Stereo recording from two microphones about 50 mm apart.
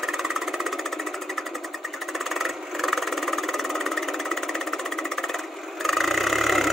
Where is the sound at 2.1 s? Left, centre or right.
Centre.